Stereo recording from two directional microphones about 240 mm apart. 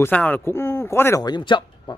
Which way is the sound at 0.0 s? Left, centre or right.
Centre.